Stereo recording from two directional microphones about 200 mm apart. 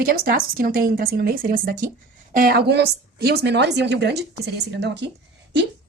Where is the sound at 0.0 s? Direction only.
45° right (ahead or behind).